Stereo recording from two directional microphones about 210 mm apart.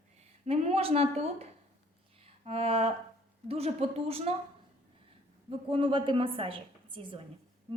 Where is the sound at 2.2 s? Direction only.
30° right (ahead or behind).